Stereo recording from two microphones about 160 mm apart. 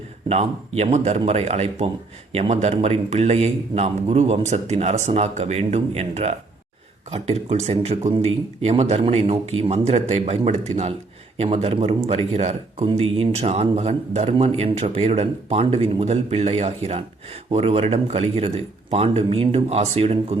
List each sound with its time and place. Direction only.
0.3 s speech: 40° right (ahead or behind)